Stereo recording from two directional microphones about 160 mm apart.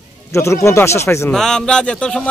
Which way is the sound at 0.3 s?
20° left (ahead or behind).